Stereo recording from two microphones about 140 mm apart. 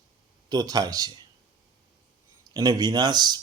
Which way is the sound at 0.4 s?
30° right (ahead or behind).